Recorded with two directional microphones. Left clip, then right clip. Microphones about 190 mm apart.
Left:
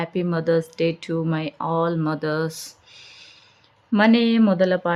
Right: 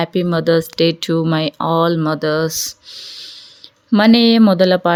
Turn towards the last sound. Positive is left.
turn(degrees=-30)  # may be behind; listen again after turning